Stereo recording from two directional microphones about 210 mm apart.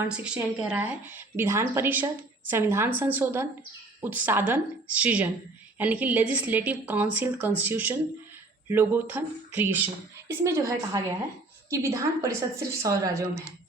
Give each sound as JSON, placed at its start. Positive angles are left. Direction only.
{"t": 0.1, "sound": "a woman's voice", "side_deg": -5}